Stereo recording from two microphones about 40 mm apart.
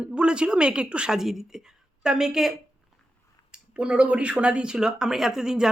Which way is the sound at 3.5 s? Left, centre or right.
Right.